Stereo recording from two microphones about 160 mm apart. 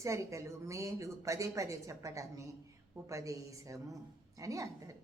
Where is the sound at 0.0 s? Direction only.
20° right (ahead or behind).